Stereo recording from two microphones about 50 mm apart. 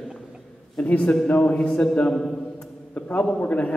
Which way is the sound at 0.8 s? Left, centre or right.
Left.